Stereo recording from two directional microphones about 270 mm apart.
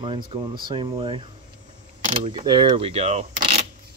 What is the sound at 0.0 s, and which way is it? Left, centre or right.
Mechanisms, centre.